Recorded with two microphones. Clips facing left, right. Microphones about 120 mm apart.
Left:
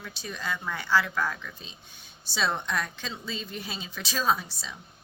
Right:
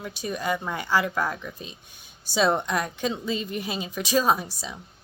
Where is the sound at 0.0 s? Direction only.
15° right (ahead or behind).